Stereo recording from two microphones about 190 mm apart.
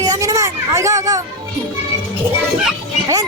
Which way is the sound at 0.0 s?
20° right (ahead or behind).